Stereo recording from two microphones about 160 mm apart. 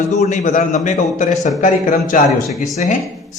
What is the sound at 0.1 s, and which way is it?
Speech, 50° left (ahead or behind).